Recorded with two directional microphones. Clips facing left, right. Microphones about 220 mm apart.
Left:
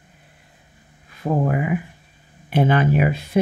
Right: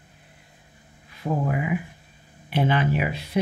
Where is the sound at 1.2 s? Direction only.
50° left (ahead or behind).